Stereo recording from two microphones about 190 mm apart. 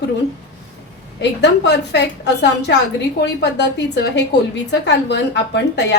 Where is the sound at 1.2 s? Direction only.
65° left (ahead or behind).